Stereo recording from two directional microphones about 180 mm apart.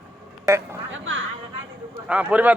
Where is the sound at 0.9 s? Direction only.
90° right.